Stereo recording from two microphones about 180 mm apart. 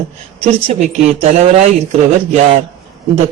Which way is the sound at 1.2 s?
35° right (ahead or behind).